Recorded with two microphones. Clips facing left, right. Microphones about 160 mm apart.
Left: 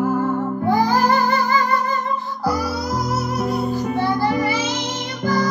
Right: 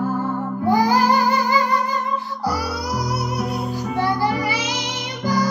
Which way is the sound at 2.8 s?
15° right (ahead or behind).